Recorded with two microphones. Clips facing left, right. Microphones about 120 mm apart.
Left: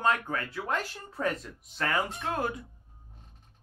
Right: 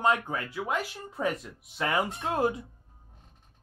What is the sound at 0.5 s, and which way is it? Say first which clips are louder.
Speech: right 1 dB; 10° right (ahead or behind).